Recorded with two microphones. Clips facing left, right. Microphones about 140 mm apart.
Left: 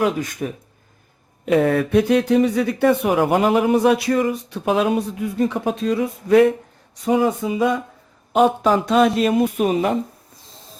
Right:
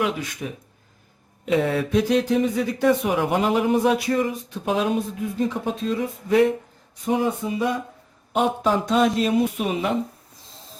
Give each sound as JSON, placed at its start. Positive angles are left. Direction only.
{"t": 0.0, "sound": "speech", "side_deg": 45}
{"t": 7.0, "sound": "speech", "side_deg": 90}
{"t": 8.3, "sound": "speech", "side_deg": 70}